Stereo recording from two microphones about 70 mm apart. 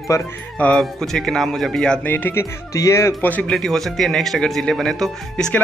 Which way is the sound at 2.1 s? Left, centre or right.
Left.